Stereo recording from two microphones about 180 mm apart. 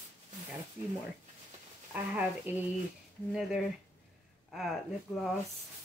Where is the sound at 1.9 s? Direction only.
10° right (ahead or behind).